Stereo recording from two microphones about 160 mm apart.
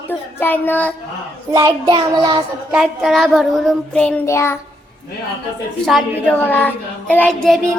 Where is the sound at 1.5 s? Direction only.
20° right (ahead or behind).